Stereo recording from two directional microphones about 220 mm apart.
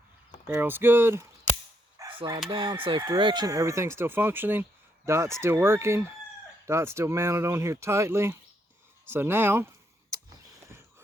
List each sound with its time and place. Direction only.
0.4 s speech: 10° right (ahead or behind)
2.0 s chicken: 20° right (ahead or behind)
2.5 s speech: 25° right (ahead or behind)